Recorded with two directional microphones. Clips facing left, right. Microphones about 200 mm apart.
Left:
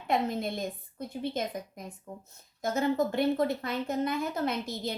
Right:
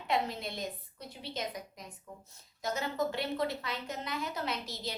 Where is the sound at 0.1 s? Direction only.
50° left (ahead or behind).